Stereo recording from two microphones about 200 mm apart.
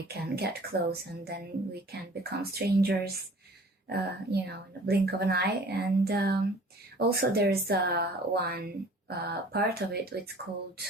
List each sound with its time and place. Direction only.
0.1 s speech: 50° right (ahead or behind)